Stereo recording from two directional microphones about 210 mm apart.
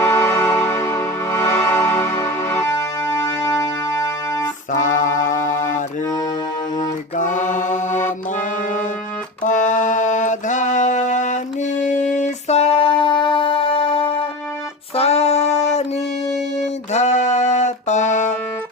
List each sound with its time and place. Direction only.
0.0 s music: 10° left (ahead or behind)
5.1 s music: 40° left (ahead or behind)
7.2 s mantra: 35° left (ahead or behind)
9.4 s a sound: 35° left (ahead or behind)
14.9 s music: 30° left (ahead or behind)
16.9 s music: 35° left (ahead or behind)